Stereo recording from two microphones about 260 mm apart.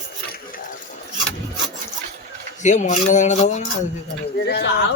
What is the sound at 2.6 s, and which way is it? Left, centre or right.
A man's voice, left.